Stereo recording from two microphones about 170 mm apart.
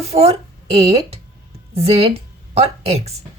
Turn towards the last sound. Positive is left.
turn(degrees=-40)  # may be behind; listen again after turning